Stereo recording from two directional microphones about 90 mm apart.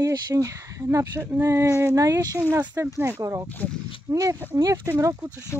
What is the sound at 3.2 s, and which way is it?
Speech, 30° right (ahead or behind).